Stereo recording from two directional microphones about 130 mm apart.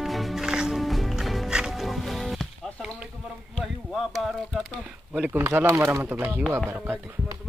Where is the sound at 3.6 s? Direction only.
Centre (ahead or behind).